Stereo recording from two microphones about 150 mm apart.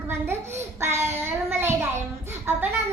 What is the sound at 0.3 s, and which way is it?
Child singing, 15° right (ahead or behind).